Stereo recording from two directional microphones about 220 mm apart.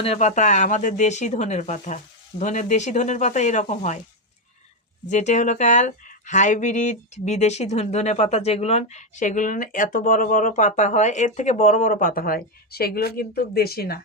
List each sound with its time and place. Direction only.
0.0 s speech: 30° left (ahead or behind)
5.0 s speech: 30° left (ahead or behind)